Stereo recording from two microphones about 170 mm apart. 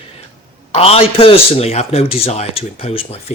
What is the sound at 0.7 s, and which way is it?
A man's voice, 35° left (ahead or behind).